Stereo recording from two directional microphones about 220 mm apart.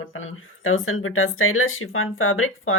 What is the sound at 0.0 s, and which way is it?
Speech, 65° left (ahead or behind).